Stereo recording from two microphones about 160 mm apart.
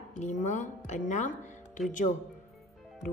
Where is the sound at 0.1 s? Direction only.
50° left (ahead or behind).